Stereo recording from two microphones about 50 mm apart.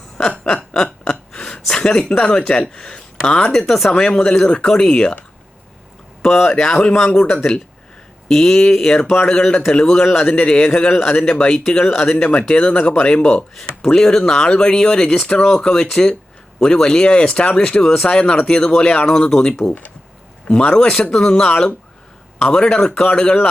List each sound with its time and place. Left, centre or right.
0.2 s chuckle: centre
1.3 s speech: centre
3.5 s speech: centre
6.2 s speech: centre; by 7.3 s left
8.3 s speech: centre
19.0 s speech: centre